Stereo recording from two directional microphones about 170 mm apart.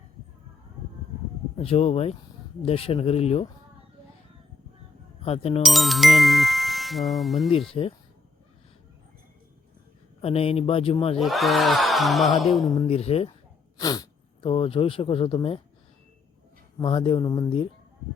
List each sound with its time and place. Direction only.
1.5 s speech: 35° left (ahead or behind)
5.2 s speech: 35° left (ahead or behind)
5.6 s speech: centre (ahead or behind)
7.8 s speech: 35° left (ahead or behind)
10.2 s speech: 35° left (ahead or behind)
11.2 s battle cry: centre (ahead or behind)
12.6 s speech: 25° left (ahead or behind)
13.0 s speech: 35° left (ahead or behind)
13.7 s speech: 20° left (ahead or behind)
16.7 s speech: 30° left (ahead or behind)